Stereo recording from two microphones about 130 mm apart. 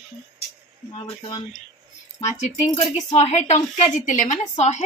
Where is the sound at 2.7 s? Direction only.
55° left (ahead or behind).